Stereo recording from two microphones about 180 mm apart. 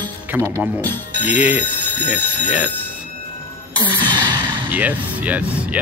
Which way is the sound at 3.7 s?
25° right (ahead or behind).